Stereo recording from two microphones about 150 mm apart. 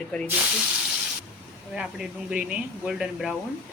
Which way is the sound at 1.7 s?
5° right (ahead or behind).